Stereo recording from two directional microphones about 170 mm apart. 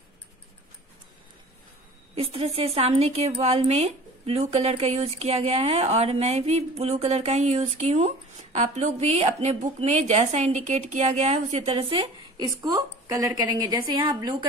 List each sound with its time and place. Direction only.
2.1 s a woman's voice: 35° right (ahead or behind)